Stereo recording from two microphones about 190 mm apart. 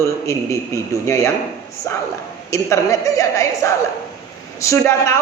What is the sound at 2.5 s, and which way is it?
A man's voice, 15° left (ahead or behind).